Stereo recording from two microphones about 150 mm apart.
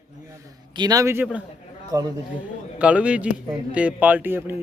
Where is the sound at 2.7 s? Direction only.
10° right (ahead or behind).